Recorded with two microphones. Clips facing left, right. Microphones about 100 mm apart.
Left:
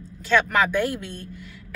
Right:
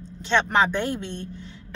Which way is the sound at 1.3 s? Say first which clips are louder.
Right 1 dB; 30° right (ahead or behind).